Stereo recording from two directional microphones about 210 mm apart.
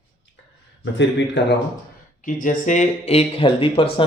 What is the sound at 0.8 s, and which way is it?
Speech, 60° left (ahead or behind).